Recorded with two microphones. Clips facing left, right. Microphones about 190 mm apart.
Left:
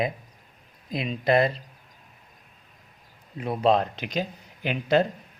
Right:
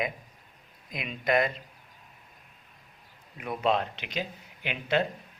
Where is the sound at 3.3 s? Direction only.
30° left (ahead or behind).